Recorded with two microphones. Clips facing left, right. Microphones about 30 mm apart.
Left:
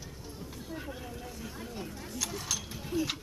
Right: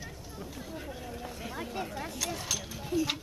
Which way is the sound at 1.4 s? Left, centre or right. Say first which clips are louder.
Right 7 dB; right.